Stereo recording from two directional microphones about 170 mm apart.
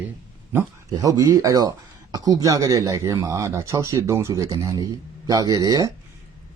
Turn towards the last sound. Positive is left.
turn(degrees=-20)  # may be behind; listen again after turning